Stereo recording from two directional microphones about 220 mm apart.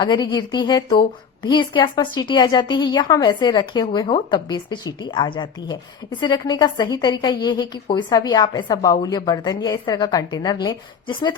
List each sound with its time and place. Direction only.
0.0 s a woman's voice: 20° left (ahead or behind)